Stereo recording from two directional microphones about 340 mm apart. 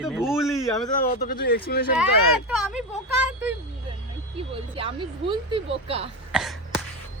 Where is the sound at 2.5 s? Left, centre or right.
Centre.